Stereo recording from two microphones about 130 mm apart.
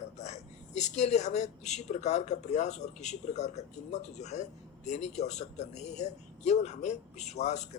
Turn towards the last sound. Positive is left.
turn(degrees=60)  # may be behind; listen again after turning